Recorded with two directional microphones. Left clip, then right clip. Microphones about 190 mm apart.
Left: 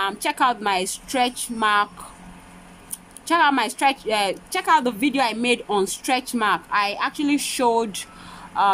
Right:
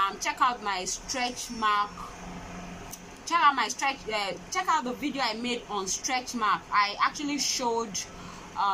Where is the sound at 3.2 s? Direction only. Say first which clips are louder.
Left 5 dB; 50° left (ahead or behind).